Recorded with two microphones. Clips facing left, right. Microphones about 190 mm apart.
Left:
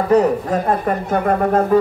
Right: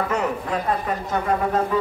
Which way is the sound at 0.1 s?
40° left (ahead or behind).